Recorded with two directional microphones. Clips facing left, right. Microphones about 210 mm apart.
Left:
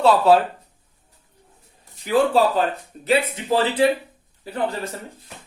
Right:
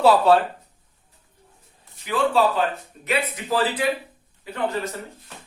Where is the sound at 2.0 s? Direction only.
40° left (ahead or behind).